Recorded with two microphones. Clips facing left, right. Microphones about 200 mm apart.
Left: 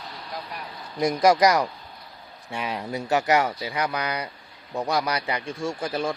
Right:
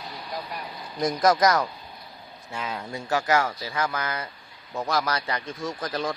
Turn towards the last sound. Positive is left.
turn(degrees=10)  # may be behind; listen again after turning